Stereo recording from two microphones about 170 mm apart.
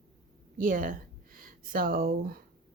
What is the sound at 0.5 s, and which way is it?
Speech, 55° right (ahead or behind).